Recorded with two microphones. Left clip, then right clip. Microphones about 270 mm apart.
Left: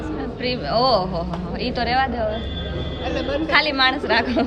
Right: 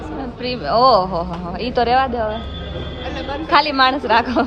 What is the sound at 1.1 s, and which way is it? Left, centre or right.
Speech, right.